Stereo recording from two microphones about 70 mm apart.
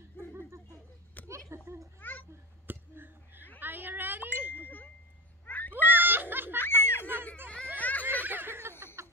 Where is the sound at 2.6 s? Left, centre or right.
Right.